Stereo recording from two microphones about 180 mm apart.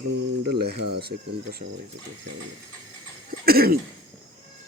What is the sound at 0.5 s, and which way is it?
Speech, 65° right (ahead or behind).